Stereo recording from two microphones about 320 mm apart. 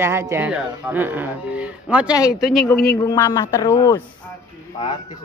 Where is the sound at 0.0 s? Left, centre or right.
Centre.